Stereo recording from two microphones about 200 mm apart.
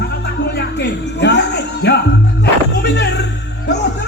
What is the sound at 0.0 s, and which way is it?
Music, 55° left (ahead or behind).